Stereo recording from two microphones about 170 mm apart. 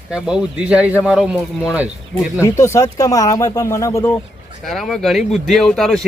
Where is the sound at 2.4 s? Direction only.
15° left (ahead or behind).